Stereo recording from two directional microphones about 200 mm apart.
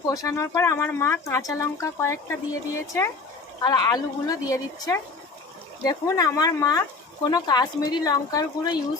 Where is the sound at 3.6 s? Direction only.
20° left (ahead or behind).